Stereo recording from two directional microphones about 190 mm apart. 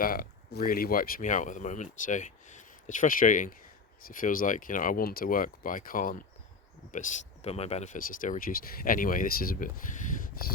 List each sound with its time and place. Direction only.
0.0 s speech: 50° left (ahead or behind)